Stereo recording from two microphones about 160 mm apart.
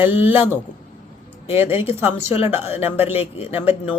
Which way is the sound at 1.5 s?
15° right (ahead or behind).